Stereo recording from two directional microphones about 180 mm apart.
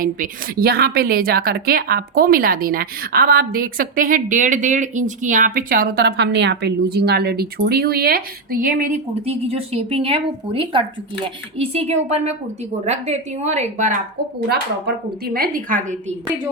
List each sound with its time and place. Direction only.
0.0 s a woman's voice: 55° right (ahead or behind)
9.2 s a woman's voice: 35° right (ahead or behind)
14.5 s speech: 60° right (ahead or behind)